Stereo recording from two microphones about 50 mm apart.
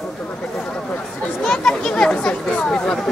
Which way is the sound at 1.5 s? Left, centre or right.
Centre.